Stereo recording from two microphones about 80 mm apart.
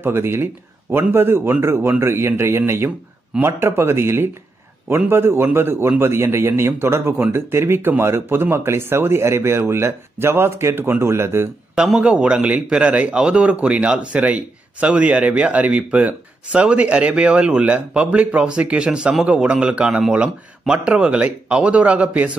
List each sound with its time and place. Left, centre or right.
0.0 s a man's voice: right
11.7 s a man's voice: centre